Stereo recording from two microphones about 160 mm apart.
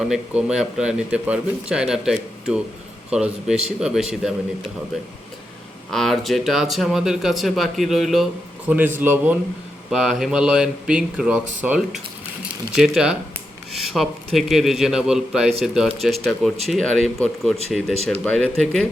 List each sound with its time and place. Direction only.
0.1 s speech: 5° right (ahead or behind)
5.9 s speech: centre (ahead or behind)